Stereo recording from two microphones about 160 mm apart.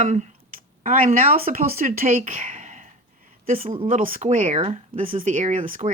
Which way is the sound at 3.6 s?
35° right (ahead or behind).